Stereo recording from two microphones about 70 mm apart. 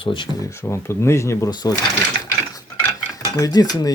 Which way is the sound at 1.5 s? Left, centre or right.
Left.